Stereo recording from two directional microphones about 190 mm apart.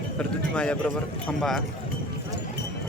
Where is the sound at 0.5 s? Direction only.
5° left (ahead or behind).